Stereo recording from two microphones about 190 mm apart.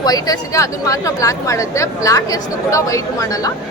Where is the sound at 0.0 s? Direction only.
20° left (ahead or behind).